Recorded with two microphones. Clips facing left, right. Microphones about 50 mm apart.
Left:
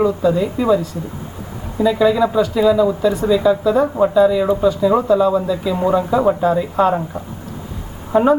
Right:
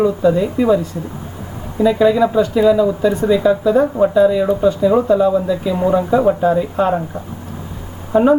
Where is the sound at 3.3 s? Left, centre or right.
Centre.